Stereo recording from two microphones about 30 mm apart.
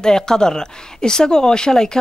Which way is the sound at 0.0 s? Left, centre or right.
Left.